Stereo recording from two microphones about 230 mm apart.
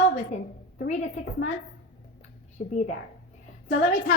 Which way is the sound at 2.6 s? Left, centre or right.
Left.